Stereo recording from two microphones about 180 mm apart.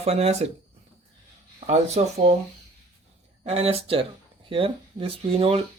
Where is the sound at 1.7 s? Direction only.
40° right (ahead or behind).